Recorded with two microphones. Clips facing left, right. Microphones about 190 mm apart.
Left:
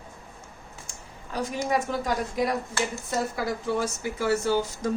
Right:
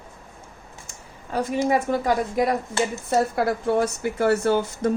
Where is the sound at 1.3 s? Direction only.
55° right (ahead or behind).